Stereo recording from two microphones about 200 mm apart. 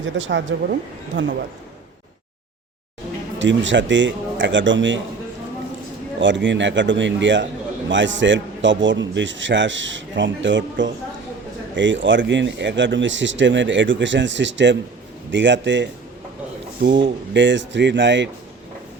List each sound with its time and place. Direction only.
0.0 s speech: 65° right (ahead or behind)
3.3 s a man's voice: 65° right (ahead or behind)
6.1 s a man's voice: 65° right (ahead or behind)